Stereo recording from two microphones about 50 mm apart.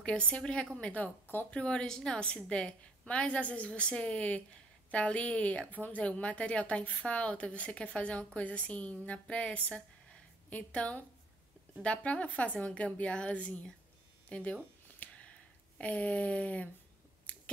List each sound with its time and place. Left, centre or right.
0.0 s a woman's voice: left
1.5 s a woman's voice: left
14.3 s a sound: left
15.8 s a woman's voice: left
17.3 s scissors: left